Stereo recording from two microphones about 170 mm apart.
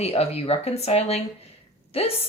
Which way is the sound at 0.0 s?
35° left (ahead or behind).